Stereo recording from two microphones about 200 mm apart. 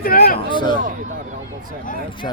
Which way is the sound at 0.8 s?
45° right (ahead or behind).